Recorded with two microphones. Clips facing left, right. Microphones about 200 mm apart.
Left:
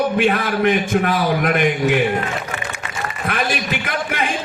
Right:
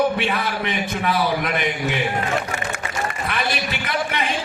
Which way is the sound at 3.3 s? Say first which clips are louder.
Left 7 dB; 45° left (ahead or behind).